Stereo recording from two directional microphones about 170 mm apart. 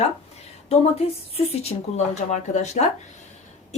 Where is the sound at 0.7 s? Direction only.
35° left (ahead or behind).